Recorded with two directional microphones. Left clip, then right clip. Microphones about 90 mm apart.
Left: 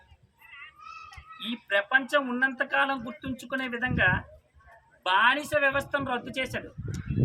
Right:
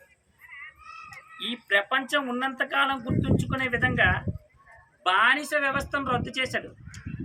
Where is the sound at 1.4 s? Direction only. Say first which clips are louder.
Right 3 dB; 40° left (ahead or behind).